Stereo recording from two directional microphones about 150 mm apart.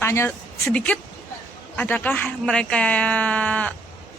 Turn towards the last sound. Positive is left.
turn(degrees=10)  # may be behind; listen again after turning